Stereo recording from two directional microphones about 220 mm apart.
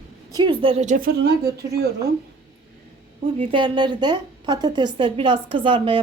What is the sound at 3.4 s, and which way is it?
A woman's voice, 25° right (ahead or behind).